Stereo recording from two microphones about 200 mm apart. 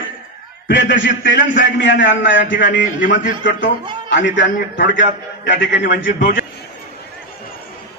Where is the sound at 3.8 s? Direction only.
20° right (ahead or behind).